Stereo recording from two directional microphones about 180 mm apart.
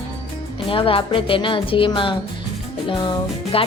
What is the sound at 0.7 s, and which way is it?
A woman's voice, 30° left (ahead or behind).